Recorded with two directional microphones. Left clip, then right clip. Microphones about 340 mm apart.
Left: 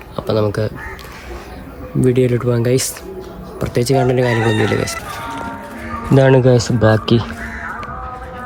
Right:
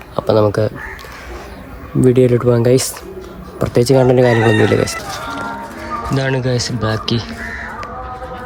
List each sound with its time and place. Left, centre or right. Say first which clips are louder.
0.2 s speech: right 4 dB; centre
2.0 s speech: right 3 dB; centre
6.1 s speech: left 9 dB; centre